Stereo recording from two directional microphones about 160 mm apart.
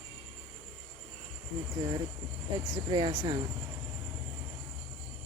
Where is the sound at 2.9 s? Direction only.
30° right (ahead or behind).